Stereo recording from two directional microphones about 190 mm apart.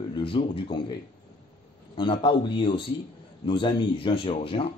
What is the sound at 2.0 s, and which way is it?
Speech, 25° left (ahead or behind).